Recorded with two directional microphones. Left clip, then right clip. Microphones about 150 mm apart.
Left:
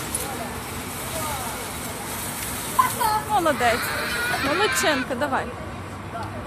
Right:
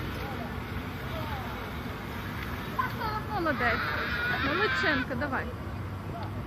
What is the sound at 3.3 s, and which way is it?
Speech, 15° left (ahead or behind).